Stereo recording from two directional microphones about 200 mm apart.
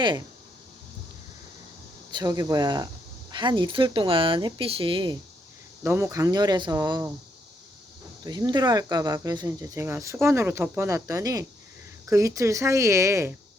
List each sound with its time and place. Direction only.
2.1 s speech: 20° right (ahead or behind)
5.8 s speech: 10° right (ahead or behind)
8.2 s speech: 20° right (ahead or behind)